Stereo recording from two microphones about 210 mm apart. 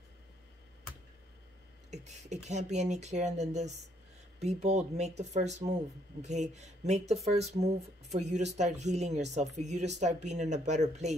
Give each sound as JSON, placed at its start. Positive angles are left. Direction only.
{"t": 1.9, "sound": "speech", "side_deg": -35}